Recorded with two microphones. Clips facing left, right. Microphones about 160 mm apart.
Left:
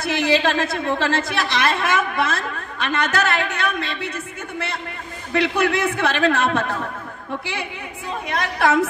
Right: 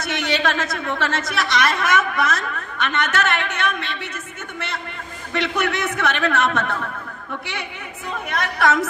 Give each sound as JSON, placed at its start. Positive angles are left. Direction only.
{"t": 0.0, "sound": "a woman's voice", "side_deg": 30}
{"t": 5.4, "sound": "a man's voice", "side_deg": 30}
{"t": 8.3, "sound": "a woman's voice", "side_deg": 30}